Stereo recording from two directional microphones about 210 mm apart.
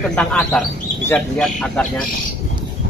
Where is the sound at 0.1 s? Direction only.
5° left (ahead or behind).